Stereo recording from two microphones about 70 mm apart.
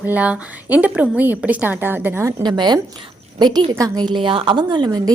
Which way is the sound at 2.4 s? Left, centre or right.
Right.